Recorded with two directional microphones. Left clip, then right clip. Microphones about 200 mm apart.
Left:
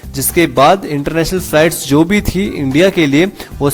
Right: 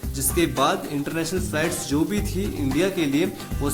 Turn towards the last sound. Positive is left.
turn(degrees=40)  # may be behind; listen again after turning